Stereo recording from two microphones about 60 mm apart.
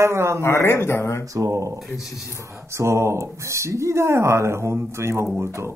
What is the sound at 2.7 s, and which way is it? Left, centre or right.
Speech, right.